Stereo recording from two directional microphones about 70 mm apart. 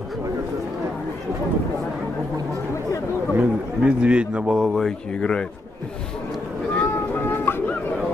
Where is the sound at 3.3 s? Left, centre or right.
Centre.